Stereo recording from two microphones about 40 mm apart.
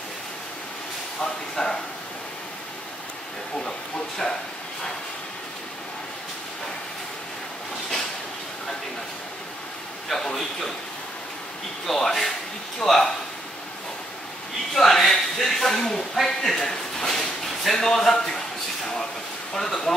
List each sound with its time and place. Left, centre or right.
1.2 s a man's voice: centre
4.2 s a man's voice: centre
10.0 s a man's voice: centre
11.8 s a man's voice: centre
14.7 s a man's voice: centre
19.5 s a man's voice: centre